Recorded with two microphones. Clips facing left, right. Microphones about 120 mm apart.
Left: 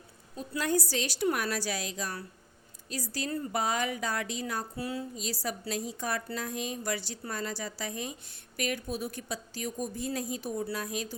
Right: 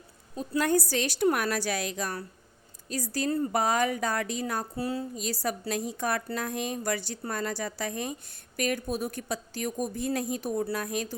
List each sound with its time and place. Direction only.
0.3 s a woman's voice: 50° right (ahead or behind)
4.8 s speech: 35° right (ahead or behind)
5.1 s a woman's voice: 55° right (ahead or behind)